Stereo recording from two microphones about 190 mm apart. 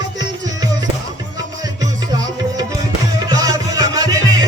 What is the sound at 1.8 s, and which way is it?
Music, 20° right (ahead or behind).